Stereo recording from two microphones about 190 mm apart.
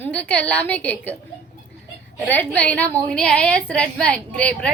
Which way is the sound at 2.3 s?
10° left (ahead or behind).